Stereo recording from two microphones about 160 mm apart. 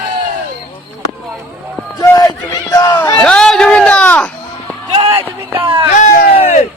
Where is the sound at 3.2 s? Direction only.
5° left (ahead or behind).